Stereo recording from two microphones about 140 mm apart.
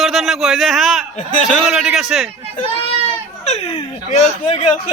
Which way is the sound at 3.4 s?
50° left (ahead or behind).